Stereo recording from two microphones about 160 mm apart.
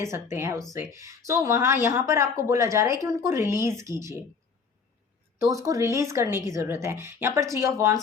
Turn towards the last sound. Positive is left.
turn(degrees=-20)  # may be behind; listen again after turning